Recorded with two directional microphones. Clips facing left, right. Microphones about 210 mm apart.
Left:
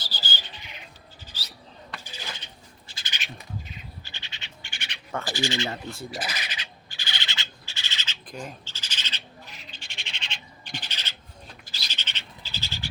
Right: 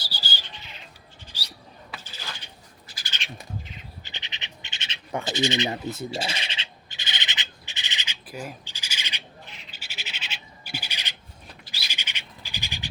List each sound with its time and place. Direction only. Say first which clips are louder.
0.0 s a sound: left 1 dB; 10° right (ahead or behind)
2.8 s bird: right 2 dB; 25° left (ahead or behind)
3.1 s bird: even; 5° left (ahead or behind)
4.0 s bird: right 3 dB; 20° right (ahead or behind)
9.7 s owl: right 1 dB; 5° right (ahead or behind)
11.7 s bird: right 2 dB; 10° right (ahead or behind)